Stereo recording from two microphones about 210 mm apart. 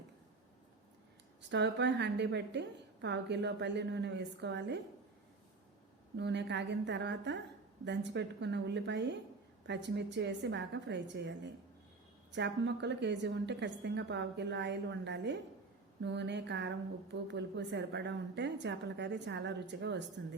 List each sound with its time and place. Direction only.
1.5 s speech: 55° right (ahead or behind)
6.1 s speech: 55° right (ahead or behind)